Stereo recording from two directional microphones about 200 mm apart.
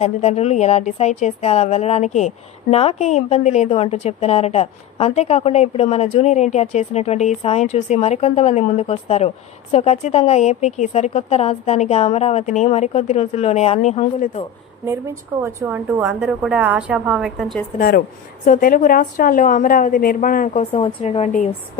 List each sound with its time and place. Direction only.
0.0 s a woman's voice: 35° left (ahead or behind)
15.4 s a woman's voice: 10° right (ahead or behind)
17.7 s a woman's voice: 45° left (ahead or behind)
20.7 s a woman's voice: 25° left (ahead or behind)